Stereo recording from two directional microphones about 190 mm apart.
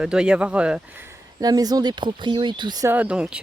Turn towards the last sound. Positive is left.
turn(degrees=-5)  # may be behind; listen again after turning